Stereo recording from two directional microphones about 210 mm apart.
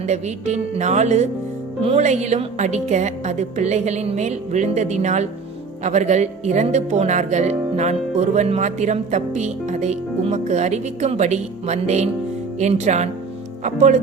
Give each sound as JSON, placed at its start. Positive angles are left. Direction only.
{"t": 0.1, "sound": "speech", "side_deg": -35}